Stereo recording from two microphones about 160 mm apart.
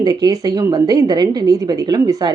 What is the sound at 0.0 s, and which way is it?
A woman's voice, 25° right (ahead or behind).